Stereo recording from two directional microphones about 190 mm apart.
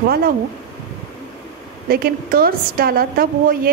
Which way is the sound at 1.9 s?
50° right (ahead or behind).